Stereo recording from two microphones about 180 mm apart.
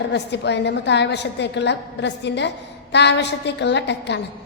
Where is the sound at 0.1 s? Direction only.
70° left (ahead or behind).